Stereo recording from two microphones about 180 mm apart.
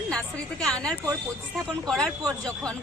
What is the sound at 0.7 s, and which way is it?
Speech, 5° left (ahead or behind).